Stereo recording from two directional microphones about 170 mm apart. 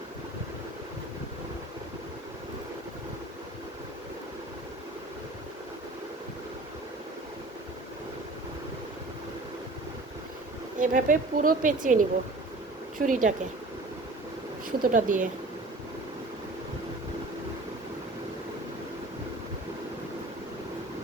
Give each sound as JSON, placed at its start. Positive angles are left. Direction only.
{"t": 10.8, "sound": "speech", "side_deg": -50}
{"t": 14.8, "sound": "speech", "side_deg": -50}